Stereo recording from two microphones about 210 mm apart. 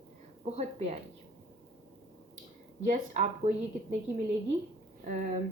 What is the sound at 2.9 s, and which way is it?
Speech, 35° right (ahead or behind).